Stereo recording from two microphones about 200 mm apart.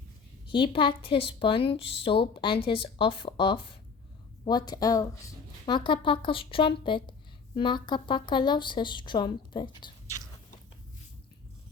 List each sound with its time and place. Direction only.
0.4 s speech: 25° left (ahead or behind)